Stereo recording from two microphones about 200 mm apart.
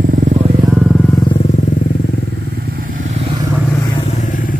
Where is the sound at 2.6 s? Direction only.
50° right (ahead or behind); by 3.4 s 30° right (ahead or behind).